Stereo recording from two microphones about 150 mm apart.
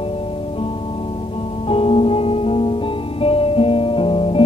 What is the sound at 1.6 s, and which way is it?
Music, 40° left (ahead or behind).